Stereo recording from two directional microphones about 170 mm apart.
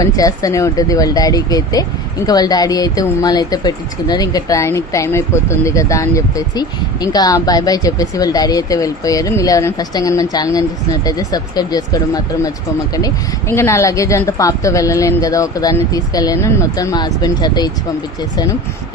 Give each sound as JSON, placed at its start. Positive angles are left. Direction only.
{"t": 0.0, "sound": "speech", "side_deg": 20}